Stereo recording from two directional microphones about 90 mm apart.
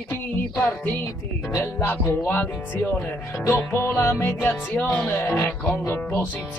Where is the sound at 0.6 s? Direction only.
20° left (ahead or behind).